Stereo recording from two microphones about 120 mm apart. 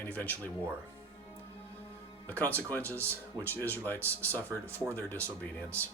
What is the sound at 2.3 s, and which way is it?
Speech, 15° left (ahead or behind).